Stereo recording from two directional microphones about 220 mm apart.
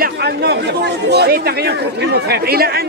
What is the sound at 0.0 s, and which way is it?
Chatter, 50° right (ahead or behind).